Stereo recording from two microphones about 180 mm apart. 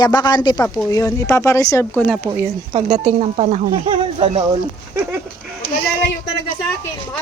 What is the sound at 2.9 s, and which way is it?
Speech, 40° right (ahead or behind).